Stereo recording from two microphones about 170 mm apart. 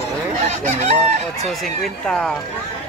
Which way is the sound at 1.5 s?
Centre (ahead or behind).